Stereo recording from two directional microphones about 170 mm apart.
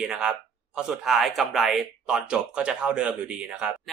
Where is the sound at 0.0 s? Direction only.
5° right (ahead or behind).